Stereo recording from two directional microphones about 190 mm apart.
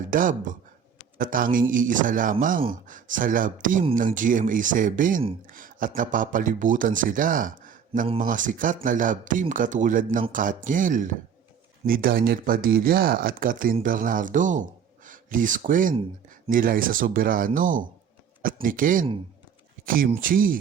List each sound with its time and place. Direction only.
0.1 s speech: 45° right (ahead or behind)